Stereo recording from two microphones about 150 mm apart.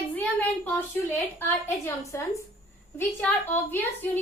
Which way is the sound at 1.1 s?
15° left (ahead or behind).